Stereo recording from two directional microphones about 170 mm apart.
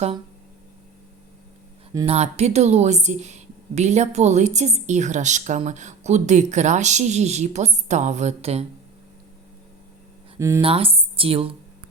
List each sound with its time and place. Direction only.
2.0 s a woman's voice: 40° right (ahead or behind)
10.3 s speech: 15° right (ahead or behind)
10.6 s speech: 35° right (ahead or behind)